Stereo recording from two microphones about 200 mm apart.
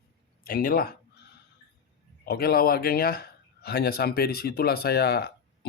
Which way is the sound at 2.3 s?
50° left (ahead or behind).